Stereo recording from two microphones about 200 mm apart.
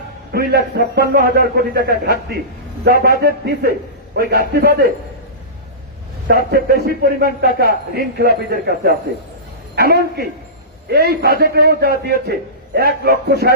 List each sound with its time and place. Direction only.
0.3 s a man's voice: 50° right (ahead or behind)
6.5 s a man's voice: 50° right (ahead or behind)